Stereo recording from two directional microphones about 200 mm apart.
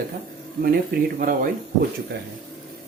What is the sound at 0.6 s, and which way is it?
Speech, 45° right (ahead or behind).